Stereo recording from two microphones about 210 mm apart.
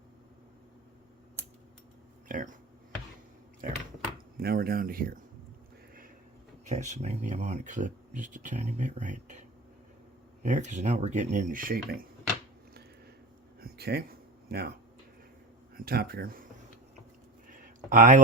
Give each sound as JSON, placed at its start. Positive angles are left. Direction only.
{"t": 2.2, "sound": "speech", "side_deg": -40}
{"t": 3.6, "sound": "speech", "side_deg": -40}
{"t": 6.7, "sound": "speech", "side_deg": -35}
{"t": 10.4, "sound": "speech", "side_deg": -35}
{"t": 13.6, "sound": "a sound", "side_deg": -45}
{"t": 15.7, "sound": "speech", "side_deg": -45}
{"t": 17.5, "sound": "a sound", "side_deg": -40}